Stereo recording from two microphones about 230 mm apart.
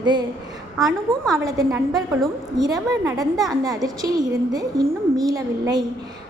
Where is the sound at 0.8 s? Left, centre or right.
Centre.